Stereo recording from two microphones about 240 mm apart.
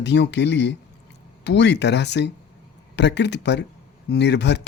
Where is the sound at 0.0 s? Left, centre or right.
Left.